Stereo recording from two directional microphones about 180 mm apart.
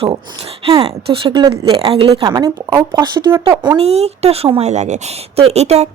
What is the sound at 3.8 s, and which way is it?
Speech, 35° right (ahead or behind).